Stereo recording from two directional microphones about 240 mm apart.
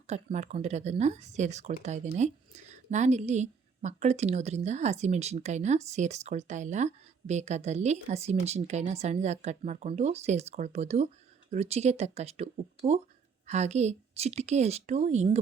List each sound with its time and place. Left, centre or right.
0.1 s speech: right